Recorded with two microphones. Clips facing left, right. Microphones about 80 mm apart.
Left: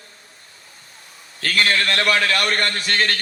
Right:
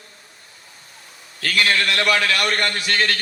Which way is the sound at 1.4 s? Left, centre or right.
Left.